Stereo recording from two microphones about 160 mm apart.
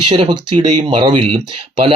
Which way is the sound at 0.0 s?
30° right (ahead or behind).